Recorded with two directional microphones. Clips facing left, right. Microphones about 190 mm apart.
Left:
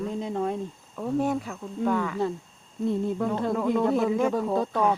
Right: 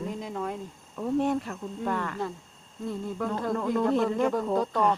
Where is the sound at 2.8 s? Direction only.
25° left (ahead or behind).